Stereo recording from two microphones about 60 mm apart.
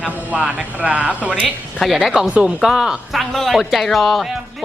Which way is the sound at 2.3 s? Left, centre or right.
Right.